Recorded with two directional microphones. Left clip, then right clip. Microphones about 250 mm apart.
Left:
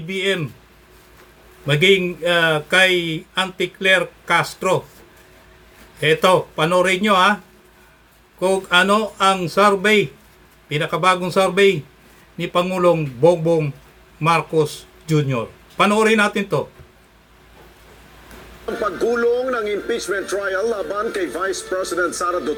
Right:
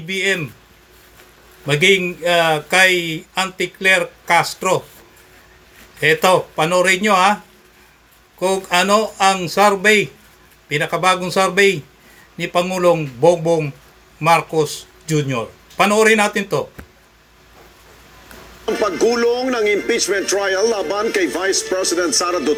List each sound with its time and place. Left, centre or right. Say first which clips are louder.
0.1 s a man's voice: right 2 dB; centre
1.6 s a man's voice: right 1 dB; centre
6.0 s a man's voice: right 1 dB; centre
8.4 s a man's voice: left 1 dB; centre
18.6 s speech: right 4 dB; right